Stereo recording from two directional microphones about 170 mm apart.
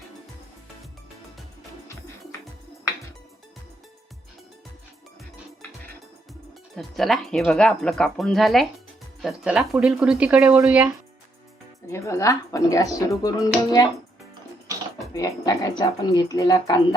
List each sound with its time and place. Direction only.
6.7 s speech: centre (ahead or behind)
11.9 s speech: 15° left (ahead or behind)
15.1 s speech: 20° left (ahead or behind)